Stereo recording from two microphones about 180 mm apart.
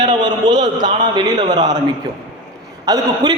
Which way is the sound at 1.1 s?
25° right (ahead or behind).